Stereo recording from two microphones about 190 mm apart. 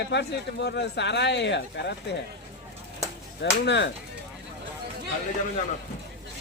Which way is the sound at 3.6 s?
65° left (ahead or behind).